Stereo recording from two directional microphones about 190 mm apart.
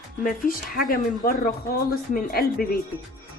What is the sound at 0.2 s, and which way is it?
Speech, 45° left (ahead or behind).